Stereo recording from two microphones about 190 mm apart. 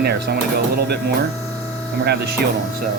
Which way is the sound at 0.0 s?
55° right (ahead or behind).